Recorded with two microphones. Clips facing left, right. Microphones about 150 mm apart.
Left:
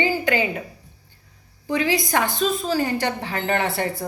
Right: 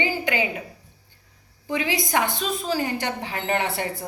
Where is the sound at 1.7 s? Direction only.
20° right (ahead or behind).